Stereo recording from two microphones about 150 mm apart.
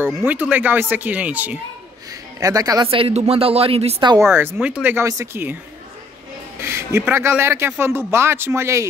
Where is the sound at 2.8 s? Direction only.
40° right (ahead or behind).